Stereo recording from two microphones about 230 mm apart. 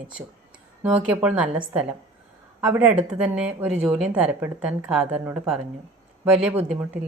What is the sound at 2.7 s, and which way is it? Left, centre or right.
A woman's voice, centre.